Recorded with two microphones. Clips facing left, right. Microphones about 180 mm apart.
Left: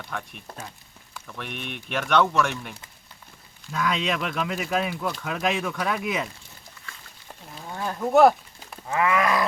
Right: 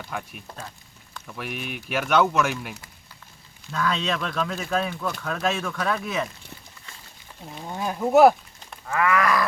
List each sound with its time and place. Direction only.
0.1 s speech: 5° right (ahead or behind)
3.7 s speech: 15° left (ahead or behind)
7.5 s cattle: 15° right (ahead or behind)
8.9 s wild animals: 20° left (ahead or behind)